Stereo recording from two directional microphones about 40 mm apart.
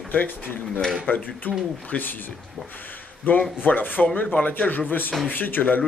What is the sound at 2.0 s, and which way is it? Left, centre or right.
Speech, left.